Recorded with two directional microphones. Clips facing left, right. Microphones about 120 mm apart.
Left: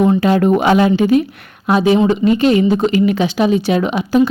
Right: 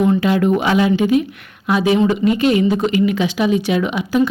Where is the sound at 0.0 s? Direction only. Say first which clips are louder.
Left 3 dB; 35° left (ahead or behind).